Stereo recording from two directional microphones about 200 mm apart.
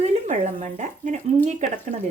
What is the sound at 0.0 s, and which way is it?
Speech, 35° right (ahead or behind).